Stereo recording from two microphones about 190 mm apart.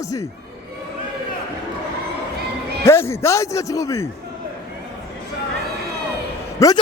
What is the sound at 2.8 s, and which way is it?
A man's voice, 15° left (ahead or behind).